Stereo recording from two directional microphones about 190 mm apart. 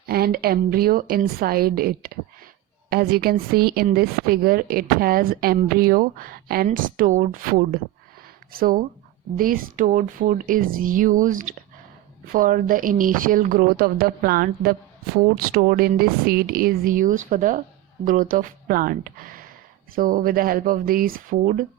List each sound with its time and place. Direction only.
0.1 s speech: 55° right (ahead or behind)